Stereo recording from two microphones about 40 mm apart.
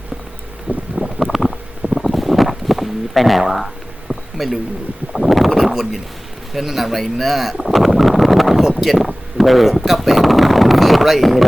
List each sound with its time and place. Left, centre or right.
0.7 s wind: right
1.0 s wind: centre
1.9 s a sound: centre
3.4 s speech: centre
4.1 s a sound: centre
5.1 s speech: centre